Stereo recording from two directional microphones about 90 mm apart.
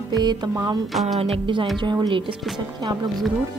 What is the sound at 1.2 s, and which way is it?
Music, 65° right (ahead or behind).